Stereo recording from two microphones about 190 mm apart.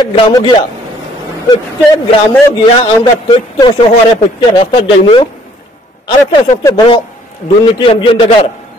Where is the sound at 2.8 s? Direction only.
25° left (ahead or behind).